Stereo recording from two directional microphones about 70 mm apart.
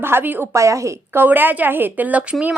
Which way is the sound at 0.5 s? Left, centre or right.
Right.